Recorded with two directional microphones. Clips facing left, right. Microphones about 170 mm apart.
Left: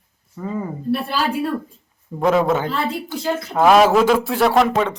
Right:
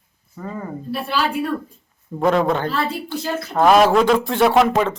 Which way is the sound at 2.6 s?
15° left (ahead or behind).